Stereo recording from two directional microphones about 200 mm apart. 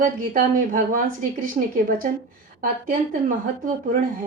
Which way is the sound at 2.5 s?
40° right (ahead or behind).